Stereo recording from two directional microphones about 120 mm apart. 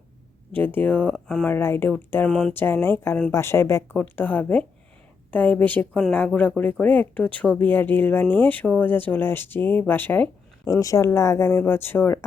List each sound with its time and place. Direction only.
0.5 s speech: 15° left (ahead or behind)
10.7 s speech: 25° left (ahead or behind)